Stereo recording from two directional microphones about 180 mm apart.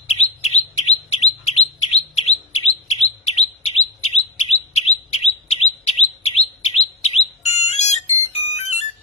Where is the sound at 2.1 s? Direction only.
35° left (ahead or behind).